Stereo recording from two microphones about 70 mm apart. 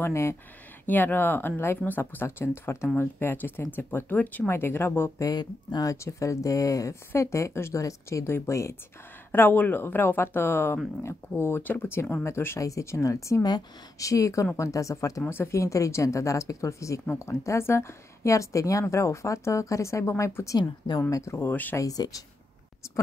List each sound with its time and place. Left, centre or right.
0.0 s speech: left
0.8 s speech: left
2.2 s speech: left
4.5 s speech: left
5.2 s speech: left
5.9 s a woman's voice: left
9.3 s speech: left
12.5 s a woman's voice: left
15.2 s a woman's voice: left
20.5 s a woman's voice: left
21.1 s a woman's voice: left
21.5 s speech: left
21.7 s speech: left